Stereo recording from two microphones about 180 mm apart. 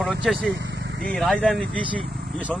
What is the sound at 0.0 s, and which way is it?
Speech, centre (ahead or behind).